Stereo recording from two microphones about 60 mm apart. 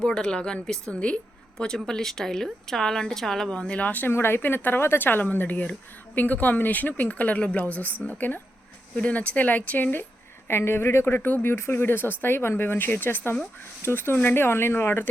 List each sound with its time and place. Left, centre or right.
0.0 s speech: centre; by 4.1 s left
4.1 s speech: left
10.5 s speech: left
11.5 s speech: left
11.8 s speech: left